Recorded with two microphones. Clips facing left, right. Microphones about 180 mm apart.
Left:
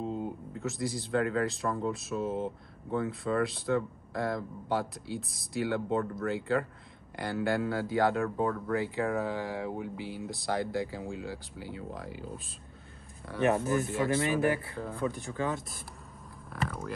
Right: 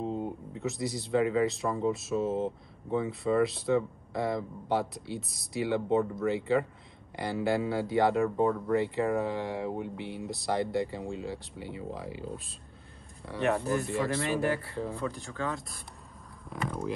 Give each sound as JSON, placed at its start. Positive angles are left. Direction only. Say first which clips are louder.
{"t": 0.0, "sound": "speech", "louder": "right 1 dB", "side_deg": 0}